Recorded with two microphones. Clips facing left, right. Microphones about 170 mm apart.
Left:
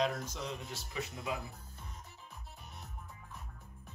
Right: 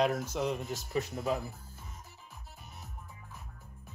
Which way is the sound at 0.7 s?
45° right (ahead or behind).